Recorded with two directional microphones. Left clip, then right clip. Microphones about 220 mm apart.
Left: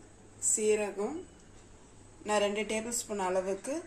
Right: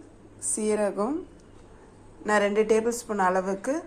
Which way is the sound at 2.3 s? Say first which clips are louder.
Right 8 dB; 10° right (ahead or behind).